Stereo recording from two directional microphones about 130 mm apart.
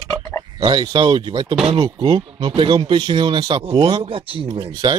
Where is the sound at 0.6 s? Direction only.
35° right (ahead or behind).